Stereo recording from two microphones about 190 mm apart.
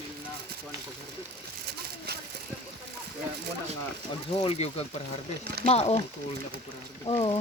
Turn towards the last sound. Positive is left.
turn(degrees=30)  # may be behind; listen again after turning